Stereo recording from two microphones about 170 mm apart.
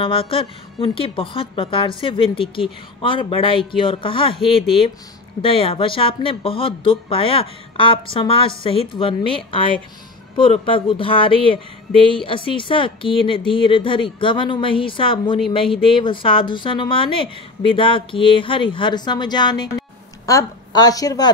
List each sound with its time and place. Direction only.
0.0 s a woman's voice: 30° left (ahead or behind)